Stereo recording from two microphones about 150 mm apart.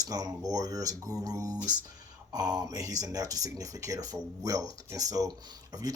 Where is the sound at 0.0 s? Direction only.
25° right (ahead or behind).